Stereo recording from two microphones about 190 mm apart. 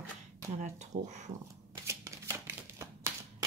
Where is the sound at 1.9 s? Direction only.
15° right (ahead or behind).